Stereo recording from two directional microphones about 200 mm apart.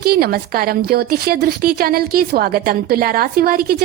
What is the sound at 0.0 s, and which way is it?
A woman's voice, 50° right (ahead or behind).